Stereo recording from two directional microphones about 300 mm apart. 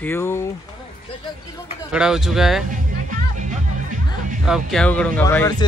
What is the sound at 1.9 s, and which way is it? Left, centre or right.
Speech, centre.